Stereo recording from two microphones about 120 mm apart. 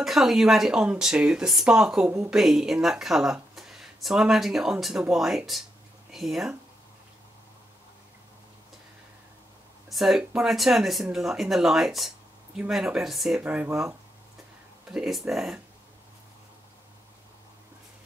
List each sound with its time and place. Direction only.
0.0 s speech: centre (ahead or behind)
9.8 s speech: centre (ahead or behind)
13.4 s speech: 15° right (ahead or behind)